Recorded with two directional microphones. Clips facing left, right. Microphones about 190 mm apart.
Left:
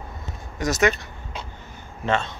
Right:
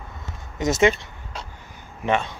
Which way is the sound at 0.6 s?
25° right (ahead or behind).